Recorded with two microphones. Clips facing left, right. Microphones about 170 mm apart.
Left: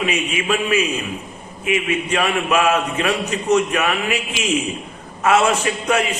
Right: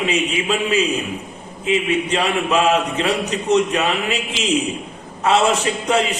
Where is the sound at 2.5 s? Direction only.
20° right (ahead or behind).